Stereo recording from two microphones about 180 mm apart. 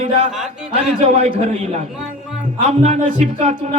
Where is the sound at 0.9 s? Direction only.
40° right (ahead or behind).